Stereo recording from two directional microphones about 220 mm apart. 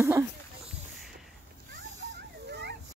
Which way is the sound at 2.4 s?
50° right (ahead or behind).